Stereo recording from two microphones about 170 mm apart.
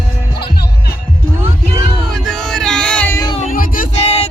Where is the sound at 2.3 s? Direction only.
5° left (ahead or behind).